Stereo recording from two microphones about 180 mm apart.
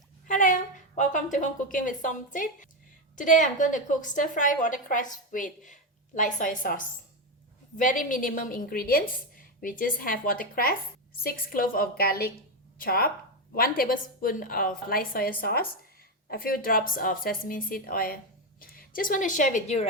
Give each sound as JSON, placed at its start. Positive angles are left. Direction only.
{"t": 0.3, "sound": "a woman's voice", "side_deg": 45}